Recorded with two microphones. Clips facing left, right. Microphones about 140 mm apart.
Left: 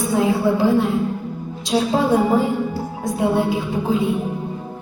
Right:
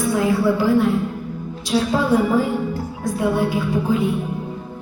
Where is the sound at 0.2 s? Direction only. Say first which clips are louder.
Left 2 dB; 20° left (ahead or behind).